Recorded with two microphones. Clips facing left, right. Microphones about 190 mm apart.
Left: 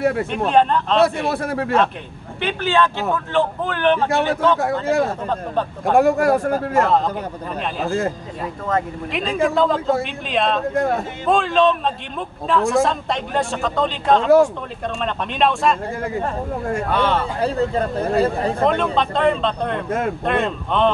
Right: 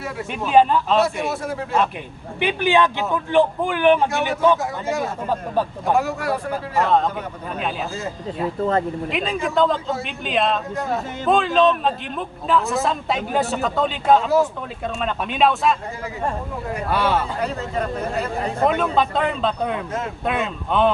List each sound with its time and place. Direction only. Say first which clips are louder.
0.0 s a man's voice: left 10 dB; 60° left (ahead or behind)
0.5 s a man's voice: right 2 dB; 5° right (ahead or behind)
1.0 s a man's voice: left 4 dB; 60° left (ahead or behind)
2.4 s speech: right 1 dB; 15° right (ahead or behind)
5.9 s speech: left 10 dB; 50° left (ahead or behind)
7.8 s speech: left 7 dB; 55° left (ahead or behind)
9.1 s a man's voice: left 4 dB; centre (ahead or behind)
10.7 s a man's voice: left 5 dB; 55° left (ahead or behind)
11.2 s a man's voice: even; centre (ahead or behind)
16.9 s speech: even; 5° right (ahead or behind)
17.4 s speech: left 5 dB; 30° left (ahead or behind)
18.7 s a man's voice: left 1 dB; 5° right (ahead or behind)